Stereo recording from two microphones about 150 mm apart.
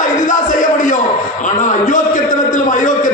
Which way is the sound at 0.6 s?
60° left (ahead or behind).